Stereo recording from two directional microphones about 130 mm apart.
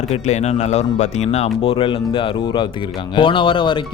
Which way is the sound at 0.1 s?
60° left (ahead or behind).